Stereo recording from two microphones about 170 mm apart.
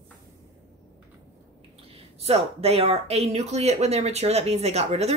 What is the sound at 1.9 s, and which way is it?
Speech, 35° right (ahead or behind).